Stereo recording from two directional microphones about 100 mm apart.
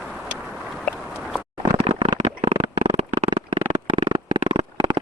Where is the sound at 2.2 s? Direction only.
80° right.